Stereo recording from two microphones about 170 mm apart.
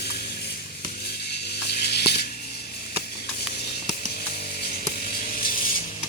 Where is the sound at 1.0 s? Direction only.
75° left (ahead or behind).